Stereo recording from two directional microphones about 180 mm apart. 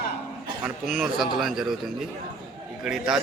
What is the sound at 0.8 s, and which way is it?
Speech, centre (ahead or behind).